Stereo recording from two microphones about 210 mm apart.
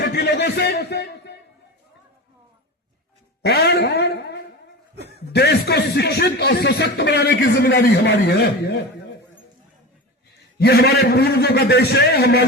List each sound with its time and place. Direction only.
0.0 s a man's voice: 50° left (ahead or behind)
3.4 s speech: 50° left (ahead or behind)
10.6 s speech: 50° left (ahead or behind)